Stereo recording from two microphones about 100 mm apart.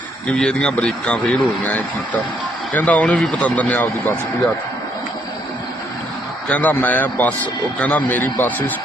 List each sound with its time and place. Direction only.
0.3 s speech: 5° left (ahead or behind)
6.5 s speech: 15° left (ahead or behind)